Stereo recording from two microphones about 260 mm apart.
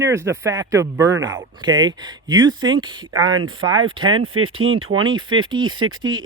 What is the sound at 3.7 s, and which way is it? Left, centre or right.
Speech, right.